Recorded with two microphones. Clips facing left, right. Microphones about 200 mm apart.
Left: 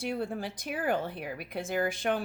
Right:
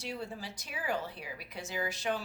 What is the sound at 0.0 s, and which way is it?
Speech, 55° left (ahead or behind).